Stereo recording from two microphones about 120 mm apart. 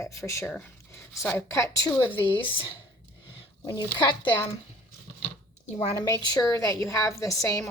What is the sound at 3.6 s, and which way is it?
Speech, 40° left (ahead or behind).